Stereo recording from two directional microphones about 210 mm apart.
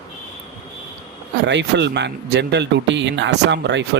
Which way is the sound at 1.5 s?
55° right (ahead or behind).